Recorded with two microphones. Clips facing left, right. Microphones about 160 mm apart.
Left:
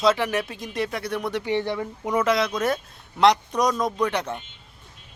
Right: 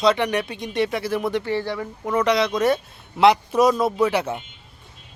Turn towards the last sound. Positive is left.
turn(degrees=-10)  # may be behind; listen again after turning